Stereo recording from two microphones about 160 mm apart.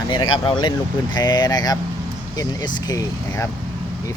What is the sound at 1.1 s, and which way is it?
Speech, 25° left (ahead or behind).